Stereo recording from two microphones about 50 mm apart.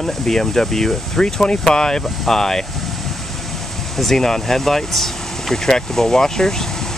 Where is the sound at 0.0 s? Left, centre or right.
Centre.